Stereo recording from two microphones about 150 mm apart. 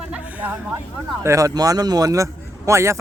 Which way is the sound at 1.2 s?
20° right (ahead or behind).